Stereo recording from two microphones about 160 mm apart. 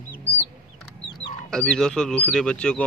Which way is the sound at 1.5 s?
5° left (ahead or behind).